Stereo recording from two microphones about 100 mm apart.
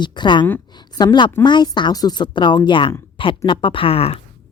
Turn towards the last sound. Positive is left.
turn(degrees=75)  # may be behind; listen again after turning